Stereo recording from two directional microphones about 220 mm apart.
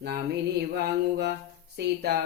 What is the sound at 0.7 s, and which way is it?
Speech, 50° right (ahead or behind).